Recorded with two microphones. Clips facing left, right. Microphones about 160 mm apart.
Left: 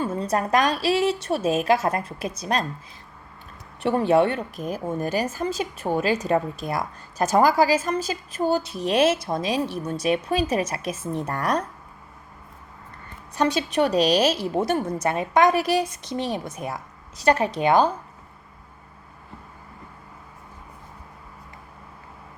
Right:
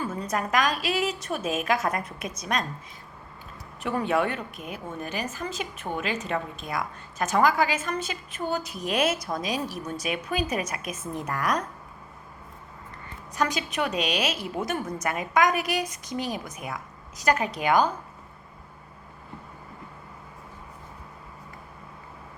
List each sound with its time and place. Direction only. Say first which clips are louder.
0.0 s a woman's voice: left 5 dB; 30° left (ahead or behind)
3.8 s a woman's voice: left 6 dB; 30° left (ahead or behind)
13.3 s a woman's voice: left 6 dB; 30° left (ahead or behind)